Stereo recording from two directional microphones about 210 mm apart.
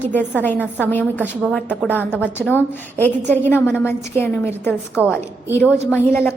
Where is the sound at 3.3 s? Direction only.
10° left (ahead or behind).